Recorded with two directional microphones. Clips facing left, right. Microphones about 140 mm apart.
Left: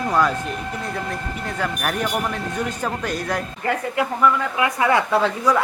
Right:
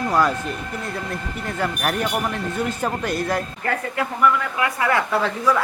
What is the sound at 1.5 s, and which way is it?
A man's voice, 10° right (ahead or behind).